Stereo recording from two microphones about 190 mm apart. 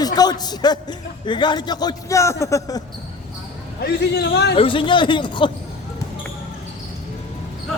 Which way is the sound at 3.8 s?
60° left (ahead or behind).